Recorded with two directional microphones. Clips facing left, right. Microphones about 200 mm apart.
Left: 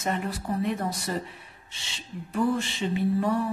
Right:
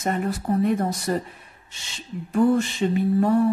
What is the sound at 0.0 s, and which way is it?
Speech, 45° right (ahead or behind).